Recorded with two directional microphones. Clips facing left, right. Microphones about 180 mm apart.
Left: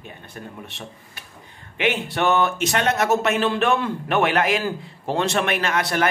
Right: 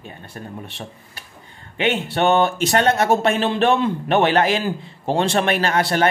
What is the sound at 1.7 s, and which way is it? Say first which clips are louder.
A man's voice: right 2 dB; 30° right (ahead or behind).